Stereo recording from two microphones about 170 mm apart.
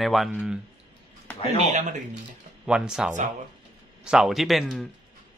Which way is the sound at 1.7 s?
45° right (ahead or behind).